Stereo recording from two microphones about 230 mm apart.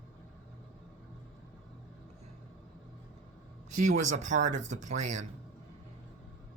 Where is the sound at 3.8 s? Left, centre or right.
Right.